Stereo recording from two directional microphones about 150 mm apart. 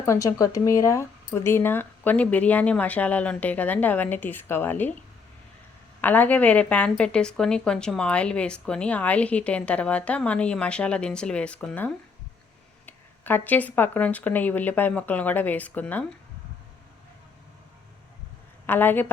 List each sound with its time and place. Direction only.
0.0 s a woman's voice: 20° left (ahead or behind)
6.0 s a woman's voice: 10° left (ahead or behind)
18.6 s a woman's voice: 15° left (ahead or behind)